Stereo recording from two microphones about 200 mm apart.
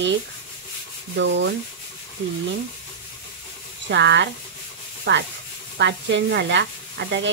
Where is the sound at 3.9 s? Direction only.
65° right (ahead or behind).